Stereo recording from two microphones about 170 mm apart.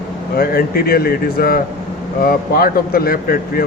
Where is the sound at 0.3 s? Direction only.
60° left (ahead or behind).